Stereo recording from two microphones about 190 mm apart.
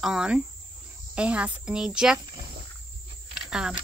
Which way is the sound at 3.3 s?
5° right (ahead or behind).